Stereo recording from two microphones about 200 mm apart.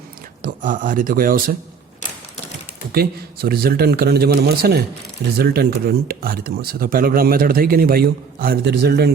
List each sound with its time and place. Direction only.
0.4 s speech: 40° right (ahead or behind)
2.9 s speech: 50° right (ahead or behind)